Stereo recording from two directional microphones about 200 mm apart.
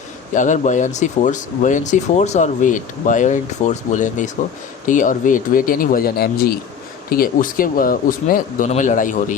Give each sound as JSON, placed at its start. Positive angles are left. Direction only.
{"t": 0.3, "sound": "speech", "side_deg": 40}